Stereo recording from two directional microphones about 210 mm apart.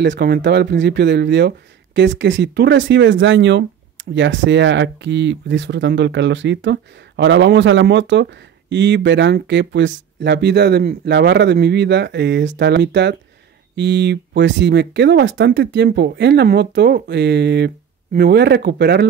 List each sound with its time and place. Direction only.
0.0 s speech: 50° right (ahead or behind)